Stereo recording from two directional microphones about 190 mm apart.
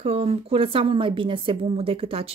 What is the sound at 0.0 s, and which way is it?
A woman's voice, 30° right (ahead or behind).